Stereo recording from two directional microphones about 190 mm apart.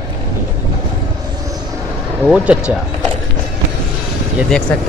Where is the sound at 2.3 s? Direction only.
5° right (ahead or behind).